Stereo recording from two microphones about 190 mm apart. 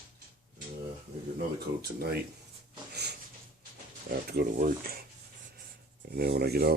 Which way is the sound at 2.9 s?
60° right (ahead or behind).